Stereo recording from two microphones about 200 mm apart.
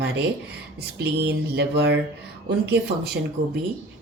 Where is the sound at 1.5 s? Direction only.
55° right (ahead or behind).